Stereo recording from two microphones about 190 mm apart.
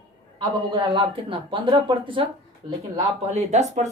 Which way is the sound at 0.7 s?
25° right (ahead or behind).